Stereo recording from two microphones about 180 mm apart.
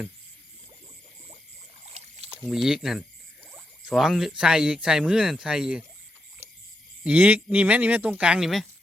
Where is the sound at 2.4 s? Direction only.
5° right (ahead or behind).